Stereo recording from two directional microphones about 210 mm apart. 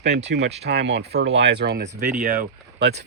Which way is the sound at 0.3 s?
55° right (ahead or behind).